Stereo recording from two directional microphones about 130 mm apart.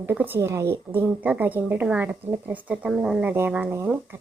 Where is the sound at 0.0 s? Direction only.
15° right (ahead or behind).